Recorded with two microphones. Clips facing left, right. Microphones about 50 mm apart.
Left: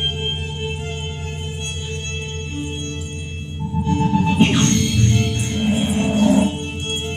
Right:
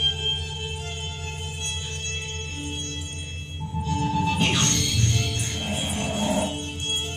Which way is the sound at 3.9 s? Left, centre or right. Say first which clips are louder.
Left 6 dB; left.